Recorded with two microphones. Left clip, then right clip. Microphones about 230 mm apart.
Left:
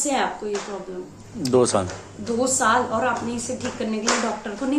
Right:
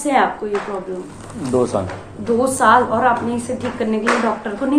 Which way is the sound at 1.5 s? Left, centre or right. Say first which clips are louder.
Right 1 dB; left.